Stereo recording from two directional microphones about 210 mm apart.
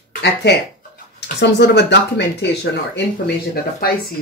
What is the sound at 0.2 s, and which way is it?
Speech, 55° left (ahead or behind).